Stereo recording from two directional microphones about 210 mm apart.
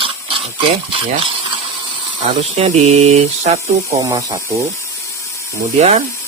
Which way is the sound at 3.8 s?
15° right (ahead or behind).